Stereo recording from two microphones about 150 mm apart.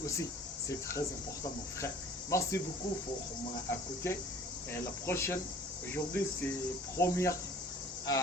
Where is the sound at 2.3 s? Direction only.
20° left (ahead or behind).